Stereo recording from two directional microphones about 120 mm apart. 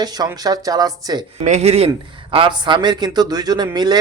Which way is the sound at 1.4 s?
70° right (ahead or behind).